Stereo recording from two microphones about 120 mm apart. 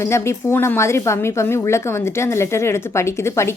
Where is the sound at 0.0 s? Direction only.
20° left (ahead or behind).